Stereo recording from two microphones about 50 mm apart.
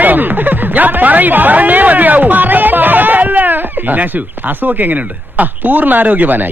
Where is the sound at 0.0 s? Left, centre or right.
Right.